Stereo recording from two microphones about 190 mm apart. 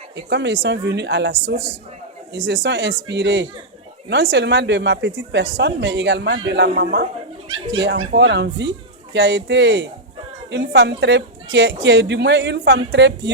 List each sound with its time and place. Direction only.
0.3 s speech: 65° right (ahead or behind)
7.4 s speech: 25° right (ahead or behind)
7.8 s speech: 65° right (ahead or behind)